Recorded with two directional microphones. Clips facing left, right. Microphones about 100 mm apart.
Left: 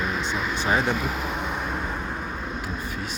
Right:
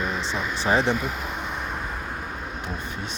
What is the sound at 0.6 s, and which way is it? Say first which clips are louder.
Speech: right 2 dB; 30° right (ahead or behind).